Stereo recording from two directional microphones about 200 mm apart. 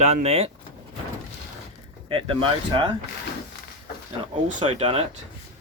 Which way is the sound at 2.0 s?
25° right (ahead or behind).